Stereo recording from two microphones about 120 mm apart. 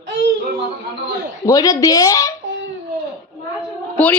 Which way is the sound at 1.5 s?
30° left (ahead or behind).